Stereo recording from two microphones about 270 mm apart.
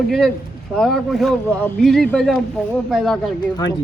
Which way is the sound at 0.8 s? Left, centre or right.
Centre.